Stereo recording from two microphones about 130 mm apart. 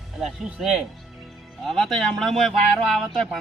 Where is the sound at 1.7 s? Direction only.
5° left (ahead or behind).